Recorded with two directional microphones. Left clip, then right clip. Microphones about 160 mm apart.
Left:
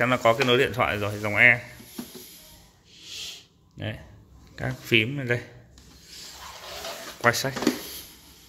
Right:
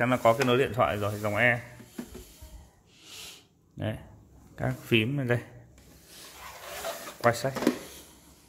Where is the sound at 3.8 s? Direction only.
30° right (ahead or behind).